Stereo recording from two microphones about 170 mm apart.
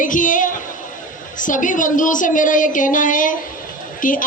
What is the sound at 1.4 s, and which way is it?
A woman's voice, 50° left (ahead or behind).